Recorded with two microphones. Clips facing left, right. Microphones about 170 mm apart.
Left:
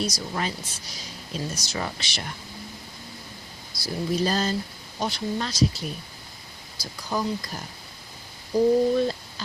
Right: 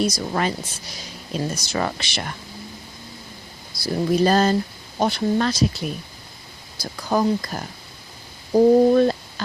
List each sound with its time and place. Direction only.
0.0 s speech: 60° right (ahead or behind)
1.5 s speech: 60° right (ahead or behind)
3.8 s speech: 60° right (ahead or behind)
6.7 s speech: 55° right (ahead or behind)